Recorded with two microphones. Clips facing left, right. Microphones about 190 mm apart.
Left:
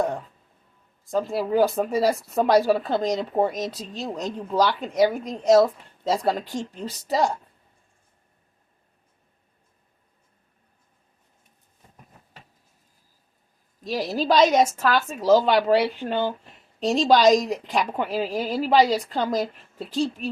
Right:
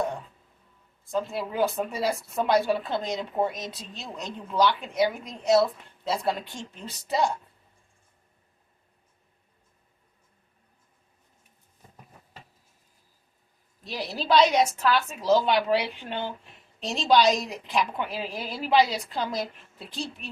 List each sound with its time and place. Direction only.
1.1 s a woman's voice: 35° left (ahead or behind)
13.8 s a woman's voice: 40° left (ahead or behind)